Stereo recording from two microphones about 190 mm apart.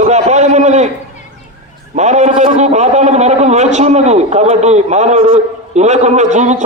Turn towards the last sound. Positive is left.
turn(degrees=-40)  # may be behind; listen again after turning